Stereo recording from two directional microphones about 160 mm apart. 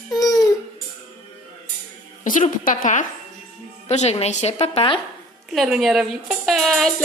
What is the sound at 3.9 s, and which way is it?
A woman's voice, 40° left (ahead or behind).